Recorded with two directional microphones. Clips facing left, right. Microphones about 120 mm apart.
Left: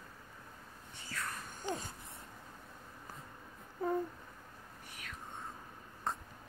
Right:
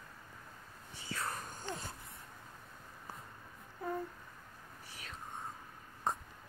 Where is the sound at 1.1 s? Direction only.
35° right (ahead or behind).